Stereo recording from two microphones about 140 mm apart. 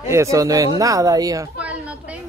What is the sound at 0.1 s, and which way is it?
A woman's voice, 20° right (ahead or behind).